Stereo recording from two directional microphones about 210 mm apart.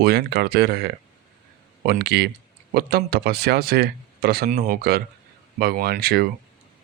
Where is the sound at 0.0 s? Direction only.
50° right (ahead or behind).